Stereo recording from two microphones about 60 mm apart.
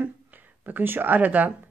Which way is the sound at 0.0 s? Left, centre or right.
Right.